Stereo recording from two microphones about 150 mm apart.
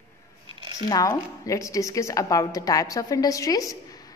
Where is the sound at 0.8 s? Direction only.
25° left (ahead or behind).